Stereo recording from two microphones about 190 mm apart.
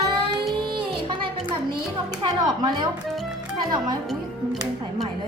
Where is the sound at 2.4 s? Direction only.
25° right (ahead or behind).